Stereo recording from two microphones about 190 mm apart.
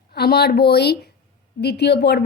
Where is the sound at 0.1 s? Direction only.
55° left (ahead or behind).